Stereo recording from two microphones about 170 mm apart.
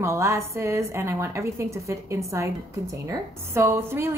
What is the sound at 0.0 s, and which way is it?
A woman's voice, 15° right (ahead or behind).